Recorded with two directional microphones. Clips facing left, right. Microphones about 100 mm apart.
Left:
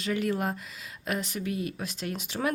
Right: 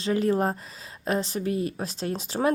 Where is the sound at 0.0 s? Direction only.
30° right (ahead or behind).